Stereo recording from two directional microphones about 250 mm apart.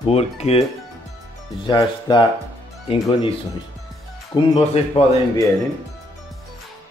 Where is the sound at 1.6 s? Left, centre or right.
Centre.